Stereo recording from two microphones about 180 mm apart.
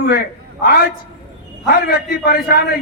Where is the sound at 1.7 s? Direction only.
55° left (ahead or behind).